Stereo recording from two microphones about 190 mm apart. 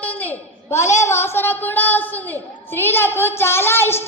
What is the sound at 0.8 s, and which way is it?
Speech, 40° left (ahead or behind).